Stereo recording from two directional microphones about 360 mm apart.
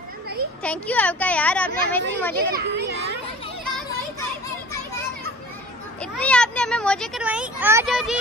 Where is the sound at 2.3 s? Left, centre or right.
Right.